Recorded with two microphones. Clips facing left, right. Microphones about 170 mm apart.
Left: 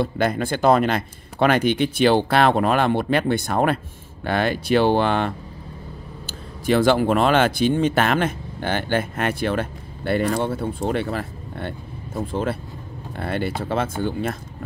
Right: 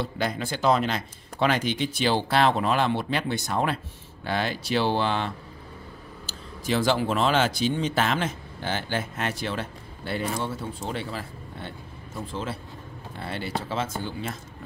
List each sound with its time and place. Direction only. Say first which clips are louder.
0.0 s speech: left 7 dB; 55° left (ahead or behind)